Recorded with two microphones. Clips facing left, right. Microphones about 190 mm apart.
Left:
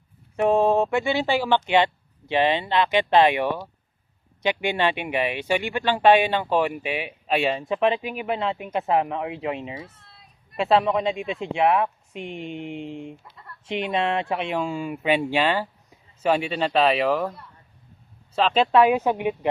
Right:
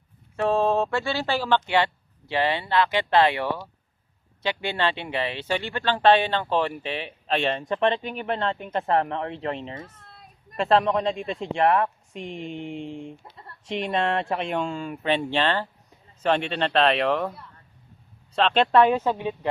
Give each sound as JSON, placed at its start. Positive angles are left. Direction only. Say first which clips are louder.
{"t": 0.3, "sound": "speech", "louder": "left 3 dB", "side_deg": 15}
{"t": 10.0, "sound": "children playing", "louder": "right 4 dB", "side_deg": -45}
{"t": 10.6, "sound": "speech", "louder": "left 1 dB", "side_deg": 5}